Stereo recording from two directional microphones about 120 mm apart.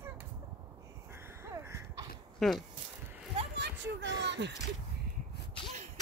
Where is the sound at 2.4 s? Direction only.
Centre (ahead or behind).